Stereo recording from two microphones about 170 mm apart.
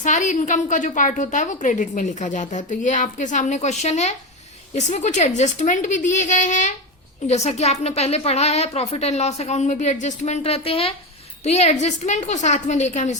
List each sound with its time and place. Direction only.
0.0 s a woman's voice: 45° left (ahead or behind)